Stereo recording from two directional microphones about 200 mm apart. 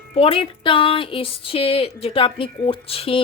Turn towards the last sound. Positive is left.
turn(degrees=30)  # may be behind; listen again after turning